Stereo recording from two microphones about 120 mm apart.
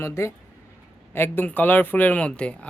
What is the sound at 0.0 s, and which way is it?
Speech, 25° left (ahead or behind).